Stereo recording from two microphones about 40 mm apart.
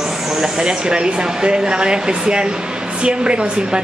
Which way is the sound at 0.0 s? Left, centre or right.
Centre.